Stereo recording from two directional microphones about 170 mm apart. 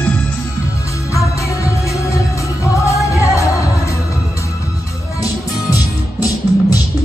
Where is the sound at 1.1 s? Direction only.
20° left (ahead or behind).